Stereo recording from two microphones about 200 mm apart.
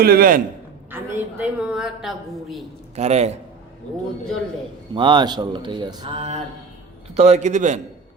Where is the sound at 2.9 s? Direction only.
35° right (ahead or behind).